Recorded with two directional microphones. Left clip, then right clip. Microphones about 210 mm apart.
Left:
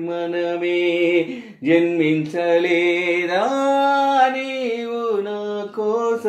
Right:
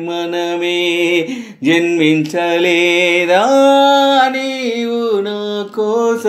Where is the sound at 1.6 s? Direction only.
45° right (ahead or behind).